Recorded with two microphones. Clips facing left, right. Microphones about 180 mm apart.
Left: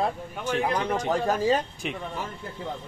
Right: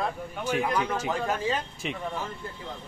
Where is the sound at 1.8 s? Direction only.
Centre (ahead or behind).